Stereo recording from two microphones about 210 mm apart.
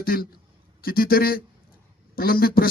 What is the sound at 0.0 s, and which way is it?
A man's voice, 45° left (ahead or behind).